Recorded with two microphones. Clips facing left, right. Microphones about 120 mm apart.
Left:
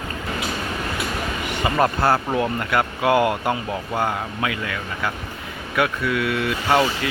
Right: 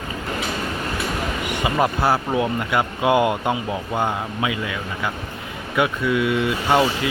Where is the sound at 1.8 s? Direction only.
10° right (ahead or behind).